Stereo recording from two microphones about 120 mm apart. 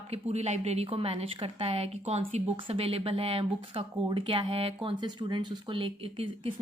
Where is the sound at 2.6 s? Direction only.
50° right (ahead or behind).